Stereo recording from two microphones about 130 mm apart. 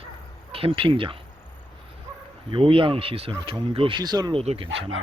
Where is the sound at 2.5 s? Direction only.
40° right (ahead or behind).